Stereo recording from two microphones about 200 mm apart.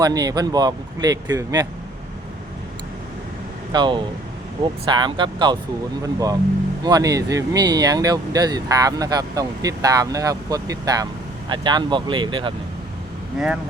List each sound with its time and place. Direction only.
0.0 s speech: 20° right (ahead or behind)
3.7 s speech: 25° right (ahead or behind)
13.4 s speech: centre (ahead or behind)